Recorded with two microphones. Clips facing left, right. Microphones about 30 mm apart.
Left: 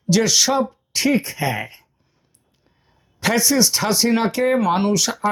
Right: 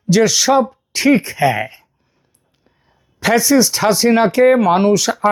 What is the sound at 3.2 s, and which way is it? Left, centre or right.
Speech, centre.